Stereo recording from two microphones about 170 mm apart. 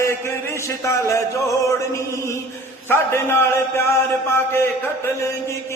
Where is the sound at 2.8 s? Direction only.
15° left (ahead or behind).